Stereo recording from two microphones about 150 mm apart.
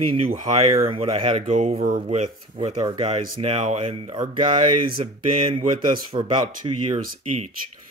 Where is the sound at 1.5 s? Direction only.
50° right (ahead or behind); by 6.8 s 30° right (ahead or behind).